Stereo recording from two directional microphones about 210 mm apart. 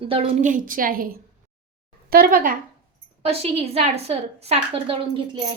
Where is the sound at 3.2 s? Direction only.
30° right (ahead or behind).